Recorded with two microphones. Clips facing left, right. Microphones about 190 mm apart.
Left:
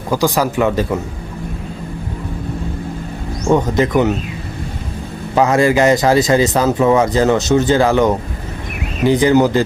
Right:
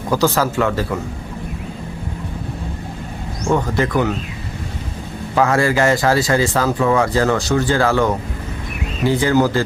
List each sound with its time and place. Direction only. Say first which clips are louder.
0.1 s speech: left 1 dB; 15° left (ahead or behind)
3.5 s speech: left 4 dB; 20° left (ahead or behind)
5.3 s speech: left 3 dB; 20° left (ahead or behind)